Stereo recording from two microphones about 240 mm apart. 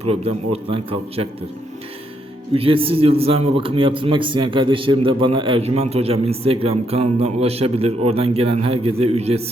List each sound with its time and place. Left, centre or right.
0.0 s a man's voice: right
2.5 s a man's voice: right